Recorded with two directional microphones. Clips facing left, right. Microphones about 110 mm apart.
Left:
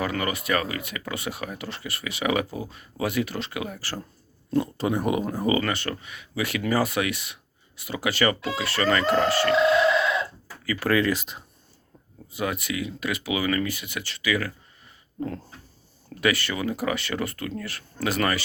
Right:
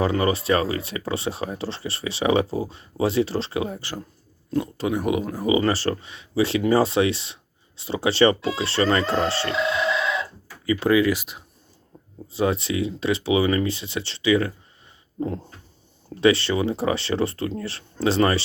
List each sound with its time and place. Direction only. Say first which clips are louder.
0.0 s speech: right 6 dB; 30° right (ahead or behind)
4.5 s speech: even; centre (ahead or behind)
5.5 s speech: right 5 dB; 30° right (ahead or behind)
10.7 s speech: right 5 dB; 20° right (ahead or behind)
10.9 s speech: right 1 dB; 5° right (ahead or behind)
12.3 s speech: right 6 dB; 30° right (ahead or behind)